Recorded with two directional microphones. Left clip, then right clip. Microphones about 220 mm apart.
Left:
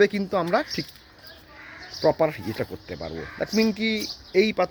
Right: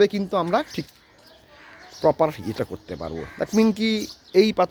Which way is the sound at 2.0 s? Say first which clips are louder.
Right 2 dB; 20° right (ahead or behind).